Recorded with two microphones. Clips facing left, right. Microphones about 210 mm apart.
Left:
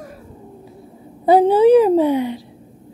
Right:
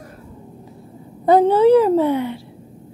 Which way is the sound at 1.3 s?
10° left (ahead or behind).